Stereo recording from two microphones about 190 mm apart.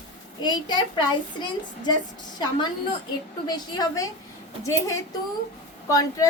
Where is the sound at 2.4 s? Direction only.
25° left (ahead or behind).